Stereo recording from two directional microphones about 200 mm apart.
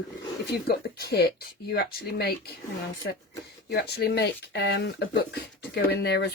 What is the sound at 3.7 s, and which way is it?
Speech, 55° left (ahead or behind).